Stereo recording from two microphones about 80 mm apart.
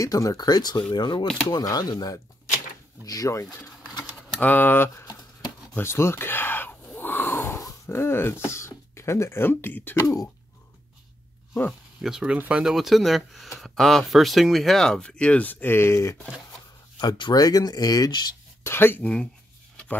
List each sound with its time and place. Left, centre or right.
0.0 s speech: left
1.6 s speech: left
3.1 s speech: left
4.4 s speech: left
5.8 s a sound: left
7.9 s speech: left
9.9 s speech: left
12.0 s speech: centre
12.7 s speech: centre; by 16.2 s left
17.0 s speech: left
18.6 s speech: left